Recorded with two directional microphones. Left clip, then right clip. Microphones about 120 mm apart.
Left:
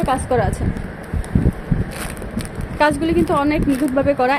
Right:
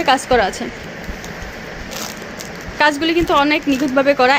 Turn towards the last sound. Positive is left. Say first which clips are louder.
# right 4 dB
turn(degrees=5)  # may be behind; listen again after turning